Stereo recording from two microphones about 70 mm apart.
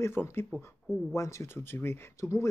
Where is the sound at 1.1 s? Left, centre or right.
Left.